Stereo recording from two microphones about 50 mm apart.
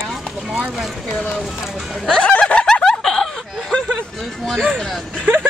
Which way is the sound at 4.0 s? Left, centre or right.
Centre.